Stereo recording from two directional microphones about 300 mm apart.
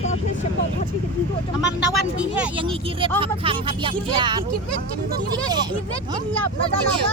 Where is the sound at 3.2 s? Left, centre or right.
Centre.